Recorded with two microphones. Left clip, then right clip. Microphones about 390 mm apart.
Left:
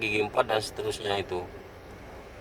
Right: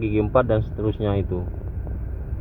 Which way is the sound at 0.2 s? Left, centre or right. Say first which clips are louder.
Right 8 dB; centre.